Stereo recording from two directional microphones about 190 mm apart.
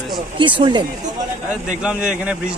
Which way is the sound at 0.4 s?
25° right (ahead or behind).